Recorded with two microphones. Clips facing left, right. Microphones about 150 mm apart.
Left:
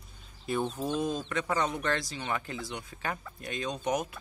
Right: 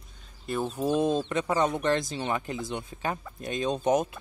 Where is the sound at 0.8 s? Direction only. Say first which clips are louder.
Right 6 dB; 25° right (ahead or behind).